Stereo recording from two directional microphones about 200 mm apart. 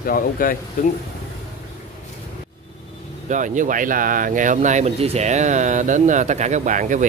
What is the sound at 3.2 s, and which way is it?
Speech, 40° right (ahead or behind).